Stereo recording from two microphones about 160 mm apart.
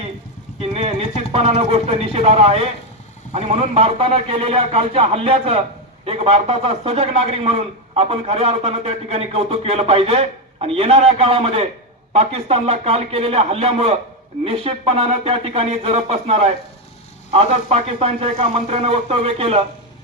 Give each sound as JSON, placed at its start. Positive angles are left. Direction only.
{"t": 0.6, "sound": "a man's voice", "side_deg": -40}